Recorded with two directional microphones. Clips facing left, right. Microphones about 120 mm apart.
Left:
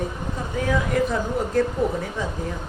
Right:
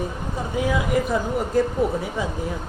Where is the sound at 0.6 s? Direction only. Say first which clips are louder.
Even; 10° right (ahead or behind).